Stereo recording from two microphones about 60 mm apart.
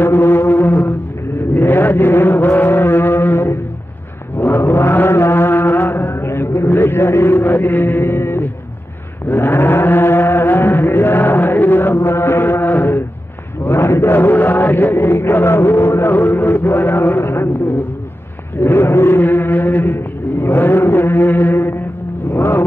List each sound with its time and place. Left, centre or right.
0.0 s foghorn: left
1.5 s chant: left
18.6 s a sound: left
22.3 s vehicle: left